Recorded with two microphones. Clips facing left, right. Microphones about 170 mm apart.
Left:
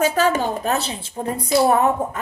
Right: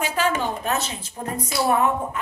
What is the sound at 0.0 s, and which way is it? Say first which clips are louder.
A woman's voice: left 5 dB; 40° left (ahead or behind).